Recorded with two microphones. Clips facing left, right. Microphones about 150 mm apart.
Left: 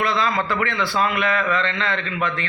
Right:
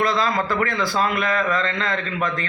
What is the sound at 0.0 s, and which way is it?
Speech, 40° right (ahead or behind).